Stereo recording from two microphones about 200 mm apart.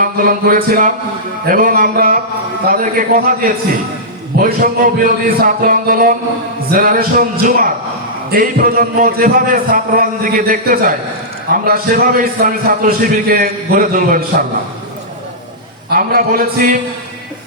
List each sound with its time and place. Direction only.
0.0 s a man's voice: 45° right (ahead or behind)
15.9 s a man's voice: 45° right (ahead or behind)